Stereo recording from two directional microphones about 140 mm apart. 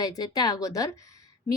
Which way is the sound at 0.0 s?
25° left (ahead or behind).